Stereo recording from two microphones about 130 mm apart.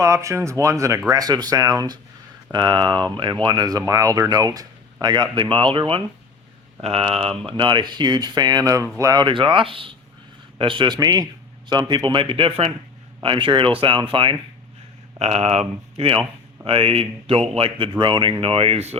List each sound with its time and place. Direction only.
0.0 s speech: 25° right (ahead or behind)
9.2 s speech: 40° right (ahead or behind)
15.2 s speech: 55° right (ahead or behind)